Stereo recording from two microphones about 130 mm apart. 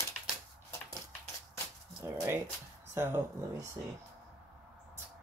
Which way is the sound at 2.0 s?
20° right (ahead or behind).